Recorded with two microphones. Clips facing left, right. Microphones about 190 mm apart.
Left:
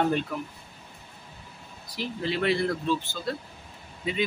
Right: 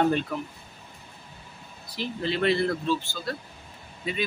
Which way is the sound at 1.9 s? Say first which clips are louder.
Right 1 dB; 10° left (ahead or behind).